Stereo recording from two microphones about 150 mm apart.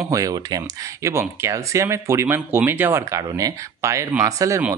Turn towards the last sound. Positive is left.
turn(degrees=-20)  # may be behind; listen again after turning